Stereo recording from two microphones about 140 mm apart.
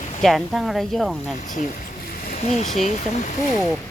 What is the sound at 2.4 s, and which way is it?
Speech, 50° left (ahead or behind).